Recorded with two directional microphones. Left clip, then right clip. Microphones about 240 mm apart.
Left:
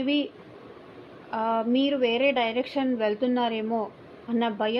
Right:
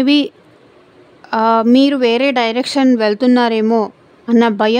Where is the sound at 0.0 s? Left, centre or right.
Right.